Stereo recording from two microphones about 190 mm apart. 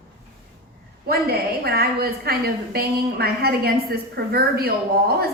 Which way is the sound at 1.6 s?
55° right (ahead or behind).